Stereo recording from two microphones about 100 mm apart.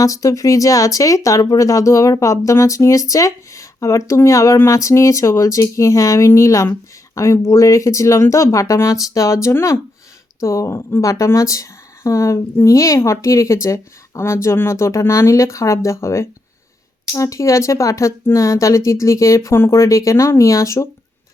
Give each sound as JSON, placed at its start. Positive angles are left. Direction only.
{"t": 0.0, "sound": "a woman's voice", "side_deg": 35}